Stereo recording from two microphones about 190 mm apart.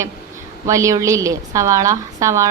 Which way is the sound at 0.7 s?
15° right (ahead or behind).